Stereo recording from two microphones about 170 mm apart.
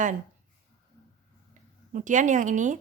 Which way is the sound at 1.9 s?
45° right (ahead or behind).